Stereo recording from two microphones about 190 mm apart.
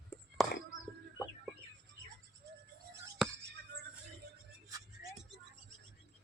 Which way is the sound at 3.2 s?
Centre (ahead or behind).